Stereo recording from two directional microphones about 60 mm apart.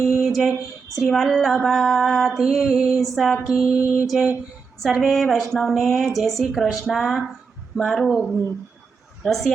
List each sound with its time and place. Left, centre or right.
0.0 s a sound: centre
0.9 s female singing: centre
2.4 s female singing: centre
3.4 s mantra: centre
3.8 s mantra: right
4.8 s female singing: centre